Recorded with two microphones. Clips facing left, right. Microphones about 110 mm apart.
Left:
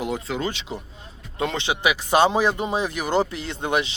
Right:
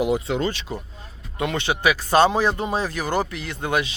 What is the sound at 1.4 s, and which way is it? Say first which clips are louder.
Speech: right 1 dB; 20° left (ahead or behind).